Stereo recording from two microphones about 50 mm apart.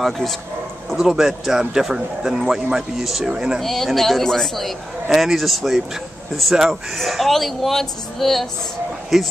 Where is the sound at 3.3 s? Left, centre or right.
Centre.